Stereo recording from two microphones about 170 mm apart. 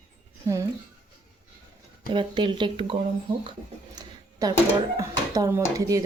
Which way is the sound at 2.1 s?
30° right (ahead or behind).